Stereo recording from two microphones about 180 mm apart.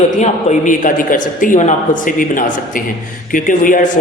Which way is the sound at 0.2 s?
40° left (ahead or behind).